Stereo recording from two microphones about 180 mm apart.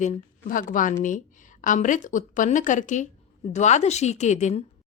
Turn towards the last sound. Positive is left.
turn(degrees=40)  # may be behind; listen again after turning